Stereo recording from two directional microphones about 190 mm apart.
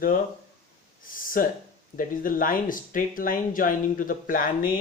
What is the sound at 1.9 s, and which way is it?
Speech, 45° left (ahead or behind).